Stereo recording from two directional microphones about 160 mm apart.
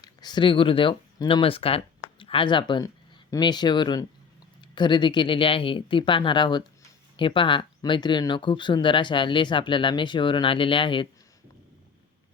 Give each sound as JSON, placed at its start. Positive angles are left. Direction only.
{"t": 0.0, "sound": "speech", "side_deg": 25}